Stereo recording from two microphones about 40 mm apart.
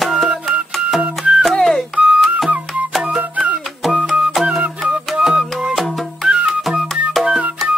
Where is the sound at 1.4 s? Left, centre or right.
Centre.